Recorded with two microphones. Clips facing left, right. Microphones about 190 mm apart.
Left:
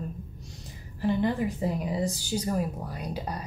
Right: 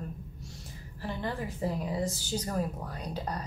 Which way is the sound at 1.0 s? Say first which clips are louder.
Left 9 dB; 15° left (ahead or behind).